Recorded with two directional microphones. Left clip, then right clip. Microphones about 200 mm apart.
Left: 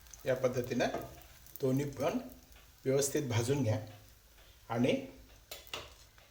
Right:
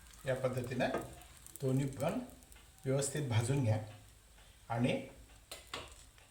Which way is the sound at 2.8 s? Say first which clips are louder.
Left 5 dB; 50° left (ahead or behind).